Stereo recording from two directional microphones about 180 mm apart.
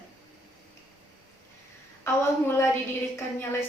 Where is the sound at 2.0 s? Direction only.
15° left (ahead or behind).